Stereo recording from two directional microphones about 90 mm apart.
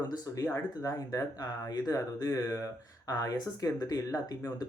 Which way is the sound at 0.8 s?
40° left (ahead or behind).